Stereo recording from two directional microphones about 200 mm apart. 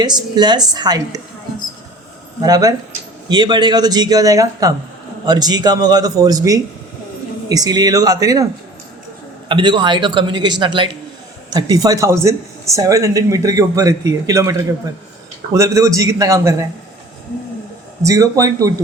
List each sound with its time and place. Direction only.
0.0 s a man's voice: 20° right (ahead or behind)
2.4 s a man's voice: 20° right (ahead or behind)
9.5 s a man's voice: 25° right (ahead or behind)
18.0 s speech: 15° right (ahead or behind)